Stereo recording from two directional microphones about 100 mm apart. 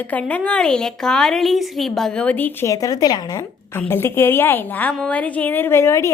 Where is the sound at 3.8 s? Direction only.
20° left (ahead or behind).